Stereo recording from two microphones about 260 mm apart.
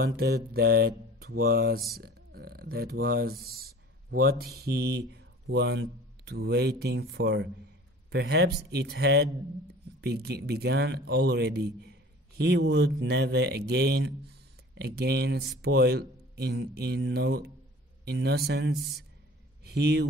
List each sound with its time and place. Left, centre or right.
0.0 s a man's voice: right